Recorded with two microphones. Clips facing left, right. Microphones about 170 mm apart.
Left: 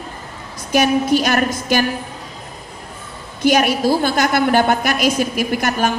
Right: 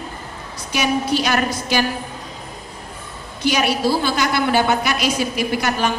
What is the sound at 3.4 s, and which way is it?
A woman's voice, 50° left (ahead or behind).